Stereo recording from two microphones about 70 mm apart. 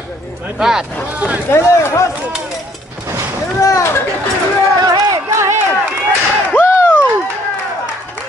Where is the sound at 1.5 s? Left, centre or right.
Left.